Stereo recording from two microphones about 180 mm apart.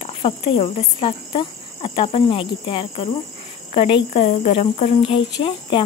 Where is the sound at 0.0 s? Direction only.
30° left (ahead or behind).